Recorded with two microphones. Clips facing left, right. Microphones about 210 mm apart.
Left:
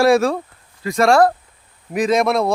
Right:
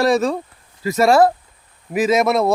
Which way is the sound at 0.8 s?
5° right (ahead or behind).